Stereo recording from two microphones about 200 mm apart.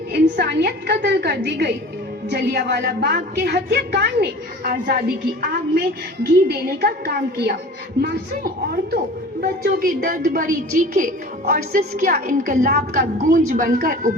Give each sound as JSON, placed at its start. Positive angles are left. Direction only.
{"t": 0.1, "sound": "a woman's voice", "side_deg": -55}